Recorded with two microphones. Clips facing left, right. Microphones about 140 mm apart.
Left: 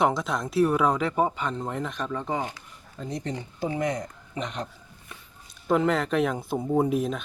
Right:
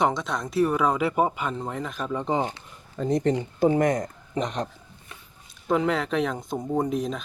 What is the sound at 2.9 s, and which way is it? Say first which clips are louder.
Speech: right 9 dB; 55° right (ahead or behind).